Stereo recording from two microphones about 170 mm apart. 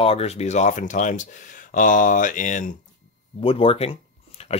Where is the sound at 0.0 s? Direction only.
35° left (ahead or behind).